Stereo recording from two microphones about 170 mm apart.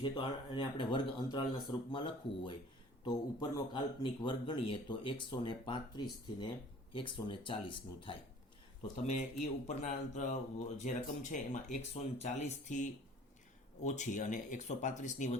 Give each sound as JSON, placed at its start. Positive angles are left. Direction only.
{"t": 0.0, "sound": "a man's voice", "side_deg": 30}
{"t": 6.9, "sound": "a man's voice", "side_deg": 30}
{"t": 9.0, "sound": "speech", "side_deg": 45}